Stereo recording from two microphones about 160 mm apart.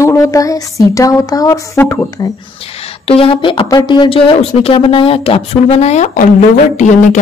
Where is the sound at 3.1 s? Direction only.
35° left (ahead or behind).